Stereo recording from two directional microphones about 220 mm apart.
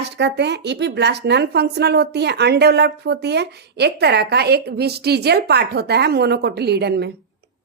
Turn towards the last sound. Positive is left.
turn(degrees=-50)  # may be behind; listen again after turning